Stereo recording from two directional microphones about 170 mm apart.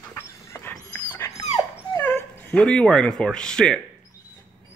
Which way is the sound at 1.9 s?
10° left (ahead or behind).